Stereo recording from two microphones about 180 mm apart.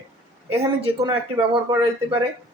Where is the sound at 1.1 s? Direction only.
30° right (ahead or behind).